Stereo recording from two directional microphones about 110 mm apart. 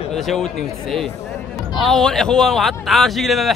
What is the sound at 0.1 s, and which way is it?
Speech, centre (ahead or behind).